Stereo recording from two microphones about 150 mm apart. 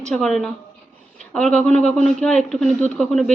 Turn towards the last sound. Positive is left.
turn(degrees=0)  # may be behind; listen again after turning